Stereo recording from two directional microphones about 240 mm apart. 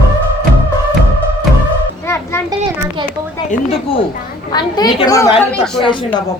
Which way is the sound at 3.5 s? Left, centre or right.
Left.